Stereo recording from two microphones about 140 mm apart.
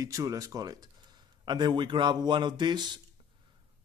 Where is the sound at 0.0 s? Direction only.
25° right (ahead or behind).